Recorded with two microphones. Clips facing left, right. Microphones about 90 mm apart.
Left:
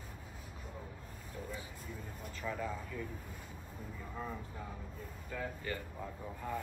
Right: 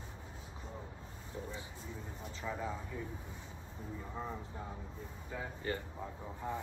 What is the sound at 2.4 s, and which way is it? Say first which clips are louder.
Speech: left 1 dB; 30° right (ahead or behind).